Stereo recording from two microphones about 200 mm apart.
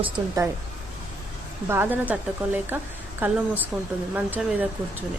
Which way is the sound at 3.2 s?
10° right (ahead or behind).